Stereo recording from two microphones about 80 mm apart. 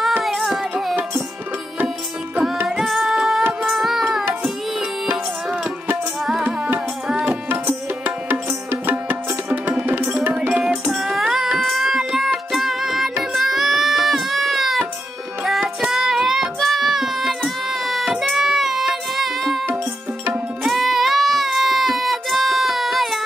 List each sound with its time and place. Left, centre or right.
0.2 s child singing: centre
2.8 s music: centre
3.6 s carnatic music: centre
5.1 s music: centre
6.4 s tabla: centre
8.6 s music: right
10.9 s child singing: centre
12.5 s music: centre
15.8 s child singing: centre
20.6 s a sound: centre